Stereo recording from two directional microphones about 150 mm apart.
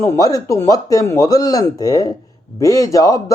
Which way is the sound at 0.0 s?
20° left (ahead or behind).